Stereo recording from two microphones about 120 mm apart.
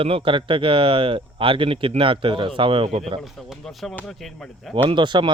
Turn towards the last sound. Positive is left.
turn(degrees=-40)  # may be behind; listen again after turning